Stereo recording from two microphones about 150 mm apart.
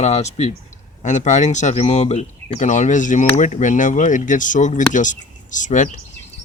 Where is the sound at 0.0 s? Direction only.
50° left (ahead or behind).